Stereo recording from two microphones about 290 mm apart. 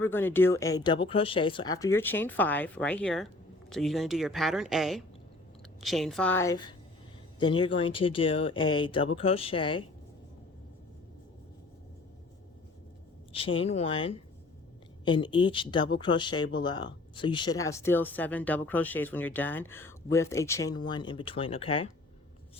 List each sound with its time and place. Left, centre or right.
0.0 s speech: centre
13.3 s speech: centre